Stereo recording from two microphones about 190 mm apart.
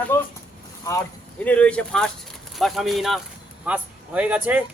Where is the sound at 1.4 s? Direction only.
5° left (ahead or behind).